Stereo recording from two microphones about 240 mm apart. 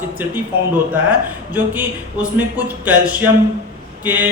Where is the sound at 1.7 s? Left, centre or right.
Centre.